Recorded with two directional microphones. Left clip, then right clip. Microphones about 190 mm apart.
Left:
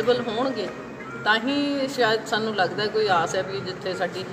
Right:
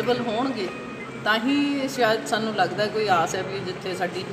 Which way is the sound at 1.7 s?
Centre (ahead or behind).